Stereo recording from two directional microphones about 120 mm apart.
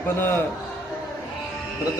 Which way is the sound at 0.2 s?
15° left (ahead or behind).